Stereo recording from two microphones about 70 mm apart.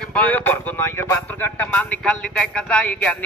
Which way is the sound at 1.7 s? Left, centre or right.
Centre.